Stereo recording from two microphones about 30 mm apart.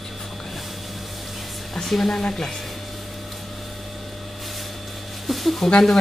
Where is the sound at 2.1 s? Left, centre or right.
Left.